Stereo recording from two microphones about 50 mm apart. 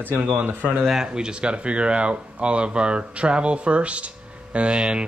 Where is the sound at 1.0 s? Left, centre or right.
Centre.